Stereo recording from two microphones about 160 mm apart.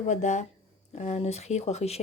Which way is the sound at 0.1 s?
50° left (ahead or behind).